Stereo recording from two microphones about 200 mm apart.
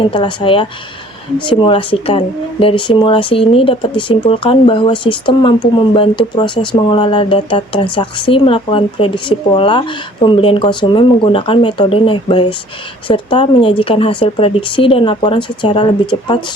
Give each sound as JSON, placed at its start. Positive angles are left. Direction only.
{"t": 0.1, "sound": "a woman's voice", "side_deg": 25}